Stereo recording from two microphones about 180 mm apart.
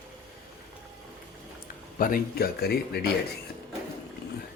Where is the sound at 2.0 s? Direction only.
55° left (ahead or behind).